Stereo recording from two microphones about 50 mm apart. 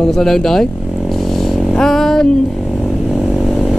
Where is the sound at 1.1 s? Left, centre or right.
Centre.